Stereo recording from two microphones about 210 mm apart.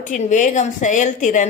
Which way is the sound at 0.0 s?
35° left (ahead or behind).